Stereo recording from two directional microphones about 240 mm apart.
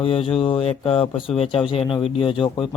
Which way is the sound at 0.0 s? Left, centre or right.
Left.